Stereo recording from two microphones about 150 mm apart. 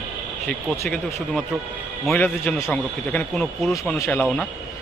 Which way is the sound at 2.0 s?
10° left (ahead or behind).